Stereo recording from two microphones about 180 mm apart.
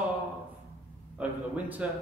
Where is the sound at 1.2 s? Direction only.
10° right (ahead or behind).